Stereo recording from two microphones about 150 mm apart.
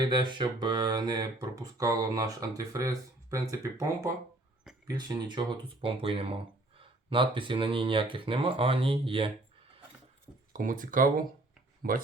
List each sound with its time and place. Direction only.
0.1 s speech: 30° right (ahead or behind)
10.5 s speech: 60° right (ahead or behind)